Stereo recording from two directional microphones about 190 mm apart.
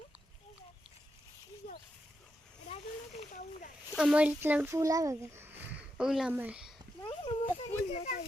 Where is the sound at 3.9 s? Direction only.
5° right (ahead or behind).